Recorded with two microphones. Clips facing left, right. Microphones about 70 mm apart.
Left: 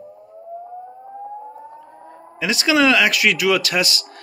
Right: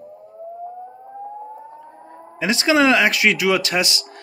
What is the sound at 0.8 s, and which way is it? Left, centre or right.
Civil defense siren, centre.